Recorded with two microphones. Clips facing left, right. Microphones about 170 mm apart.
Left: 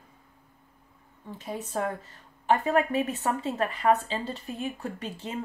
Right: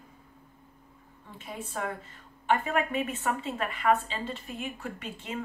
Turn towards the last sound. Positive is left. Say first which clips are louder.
# left 2 dB
turn(degrees=35)  # may be behind; listen again after turning